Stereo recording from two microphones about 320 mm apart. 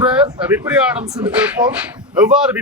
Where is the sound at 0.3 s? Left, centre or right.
Centre.